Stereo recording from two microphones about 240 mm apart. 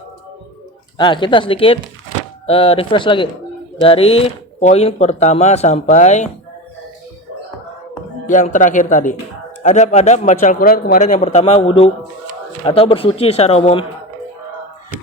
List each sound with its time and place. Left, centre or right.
0.9 s a man's voice: centre
8.3 s a man's voice: left